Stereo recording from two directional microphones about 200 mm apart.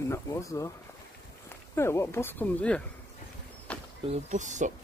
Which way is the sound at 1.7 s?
15° left (ahead or behind).